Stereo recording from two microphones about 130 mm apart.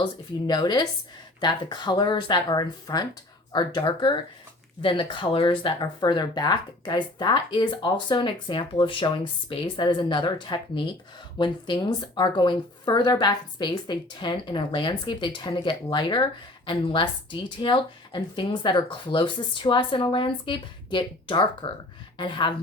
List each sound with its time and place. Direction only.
0.0 s speech: 30° left (ahead or behind)